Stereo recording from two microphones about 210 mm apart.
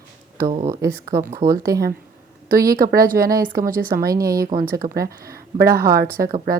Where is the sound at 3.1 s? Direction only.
15° right (ahead or behind).